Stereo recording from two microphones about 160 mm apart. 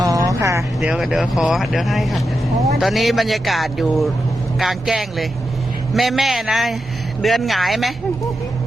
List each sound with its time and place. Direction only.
0.0 s vehicle: 20° right (ahead or behind)
0.8 s speech: 5° right (ahead or behind)